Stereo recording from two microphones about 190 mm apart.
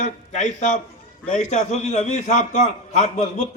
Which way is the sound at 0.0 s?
40° left (ahead or behind).